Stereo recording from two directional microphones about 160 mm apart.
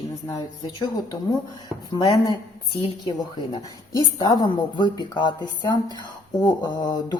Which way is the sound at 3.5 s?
25° left (ahead or behind).